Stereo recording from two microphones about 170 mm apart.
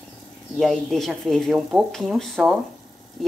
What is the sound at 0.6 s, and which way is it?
Speech, centre (ahead or behind).